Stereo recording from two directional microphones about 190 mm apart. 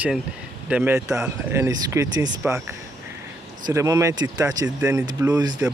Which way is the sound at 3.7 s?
15° right (ahead or behind).